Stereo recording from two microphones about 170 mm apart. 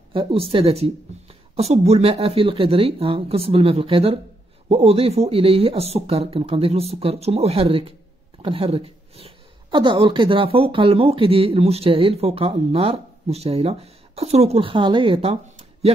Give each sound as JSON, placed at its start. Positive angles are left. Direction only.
{"t": 0.1, "sound": "speech", "side_deg": -35}